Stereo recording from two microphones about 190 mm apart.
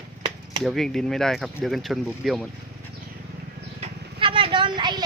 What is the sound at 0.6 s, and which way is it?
Speech, centre (ahead or behind).